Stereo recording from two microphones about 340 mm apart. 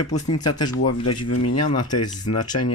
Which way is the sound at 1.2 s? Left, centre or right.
Left.